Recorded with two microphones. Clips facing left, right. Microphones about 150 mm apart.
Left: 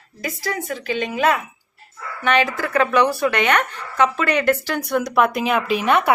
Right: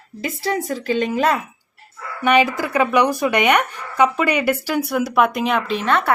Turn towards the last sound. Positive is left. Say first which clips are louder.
# left 2 dB
turn(degrees=10)  # may be behind; listen again after turning